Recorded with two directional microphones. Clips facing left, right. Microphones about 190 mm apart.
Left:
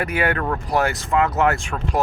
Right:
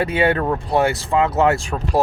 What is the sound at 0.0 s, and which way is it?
Speech, 30° right (ahead or behind).